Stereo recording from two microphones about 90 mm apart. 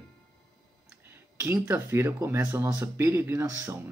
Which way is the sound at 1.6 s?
25° right (ahead or behind).